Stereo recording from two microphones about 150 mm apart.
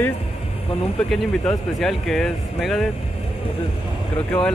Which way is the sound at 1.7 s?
Centre (ahead or behind).